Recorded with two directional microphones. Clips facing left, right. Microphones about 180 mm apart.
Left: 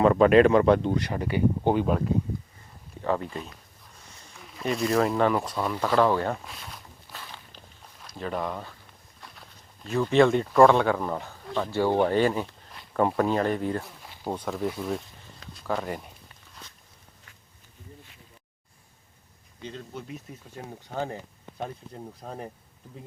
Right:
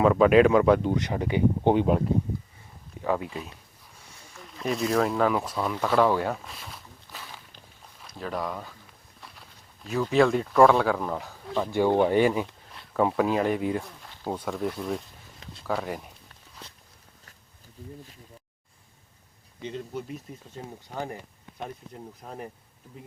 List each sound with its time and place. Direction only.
0.0 s speech: 5° right (ahead or behind); by 2.0 s 20° right (ahead or behind)
3.0 s speech: 5° right (ahead or behind)
9.8 s speech: 5° right (ahead or behind)
12.7 s speech: centre (ahead or behind)
13.8 s a sound: 5° left (ahead or behind)
14.3 s speech: centre (ahead or behind)
15.6 s a sound: 5° right (ahead or behind)
19.6 s speech: 10° right (ahead or behind)
22.2 s speech: 35° left (ahead or behind)